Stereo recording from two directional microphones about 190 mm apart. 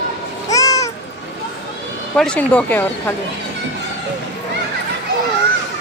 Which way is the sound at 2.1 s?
5° left (ahead or behind).